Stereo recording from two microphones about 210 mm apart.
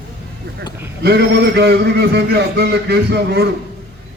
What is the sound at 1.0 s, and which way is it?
A man's voice, 50° right (ahead or behind).